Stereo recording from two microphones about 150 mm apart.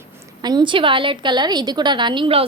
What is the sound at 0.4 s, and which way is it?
A woman's voice, 30° right (ahead or behind).